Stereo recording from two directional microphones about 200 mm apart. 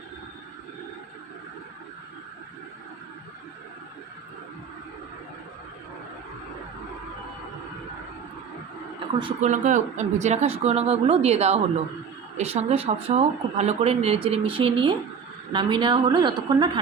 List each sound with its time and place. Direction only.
9.4 s speech: 40° right (ahead or behind); by 16.8 s 20° right (ahead or behind)